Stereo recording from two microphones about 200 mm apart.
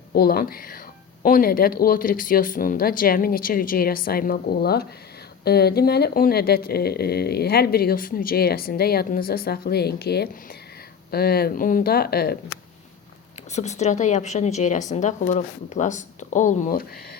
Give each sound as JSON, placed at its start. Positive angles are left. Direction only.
{"t": 0.1, "sound": "speech", "side_deg": 50}
{"t": 13.5, "sound": "speech", "side_deg": 35}